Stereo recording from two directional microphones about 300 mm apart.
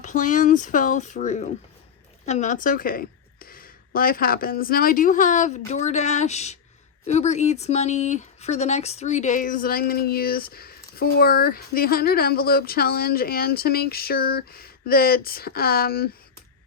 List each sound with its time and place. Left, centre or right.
0.0 s speech: left